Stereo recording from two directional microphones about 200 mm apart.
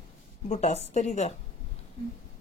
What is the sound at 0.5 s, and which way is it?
Speech, 35° left (ahead or behind).